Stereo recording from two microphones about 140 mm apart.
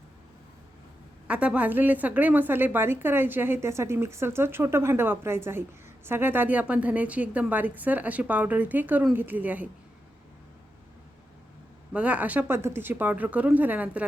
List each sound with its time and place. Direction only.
1.3 s a woman's voice: 10° right (ahead or behind)
11.9 s a woman's voice: 10° right (ahead or behind)